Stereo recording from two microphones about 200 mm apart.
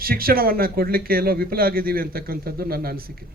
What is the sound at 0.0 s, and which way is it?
Speech, 45° right (ahead or behind).